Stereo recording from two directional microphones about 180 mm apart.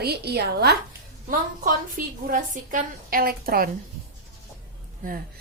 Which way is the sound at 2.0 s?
50° right (ahead or behind).